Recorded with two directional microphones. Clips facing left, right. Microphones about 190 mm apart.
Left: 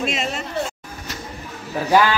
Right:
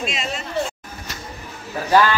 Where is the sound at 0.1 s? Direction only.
55° left (ahead or behind).